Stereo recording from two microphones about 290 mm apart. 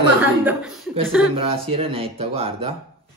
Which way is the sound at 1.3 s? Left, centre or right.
Centre.